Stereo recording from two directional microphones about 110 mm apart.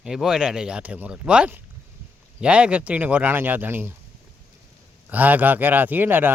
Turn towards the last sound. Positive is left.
turn(degrees=-20)  # may be behind; listen again after turning